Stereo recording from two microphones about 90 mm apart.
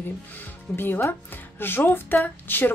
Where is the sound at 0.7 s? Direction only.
25° left (ahead or behind).